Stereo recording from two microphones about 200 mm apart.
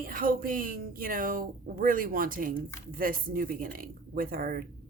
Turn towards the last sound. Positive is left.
turn(degrees=-45)  # may be behind; listen again after turning